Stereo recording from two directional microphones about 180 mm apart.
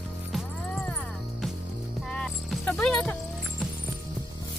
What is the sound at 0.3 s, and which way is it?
Music, centre (ahead or behind).